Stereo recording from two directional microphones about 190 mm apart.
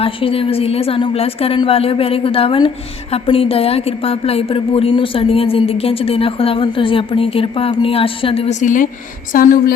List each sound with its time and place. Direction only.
0.0 s a woman's voice: 30° left (ahead or behind); by 9.7 s 50° left (ahead or behind)